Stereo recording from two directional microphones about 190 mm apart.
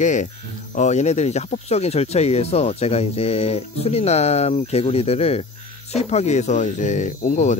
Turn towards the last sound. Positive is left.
turn(degrees=40)  # may be behind; listen again after turning